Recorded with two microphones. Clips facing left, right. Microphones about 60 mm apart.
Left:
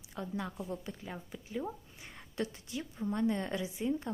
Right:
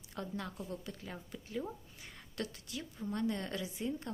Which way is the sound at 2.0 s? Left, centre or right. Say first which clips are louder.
Left 4 dB; left.